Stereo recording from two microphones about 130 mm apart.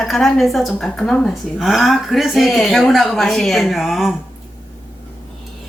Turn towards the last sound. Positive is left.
turn(degrees=0)  # may be behind; listen again after turning